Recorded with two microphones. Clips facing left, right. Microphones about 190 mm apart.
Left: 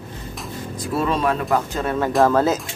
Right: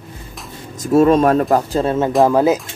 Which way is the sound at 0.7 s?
45° right (ahead or behind).